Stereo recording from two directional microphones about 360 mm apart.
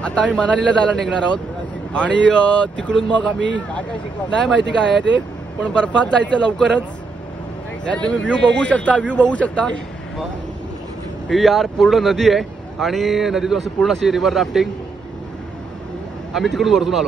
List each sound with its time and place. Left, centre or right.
0.0 s speech: centre
3.3 s speech: right
5.6 s speech: centre
7.8 s speech: centre
11.2 s speech: centre
16.3 s speech: centre